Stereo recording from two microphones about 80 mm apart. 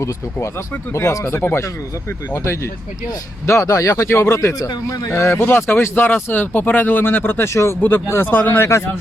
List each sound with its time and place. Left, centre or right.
0.0 s speech: left
2.3 s speech: left
7.8 s speech: left